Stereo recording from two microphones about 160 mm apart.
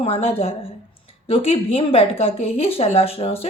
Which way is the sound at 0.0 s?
35° left (ahead or behind).